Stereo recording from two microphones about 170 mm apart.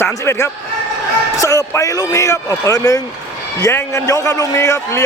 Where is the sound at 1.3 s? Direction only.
20° left (ahead or behind).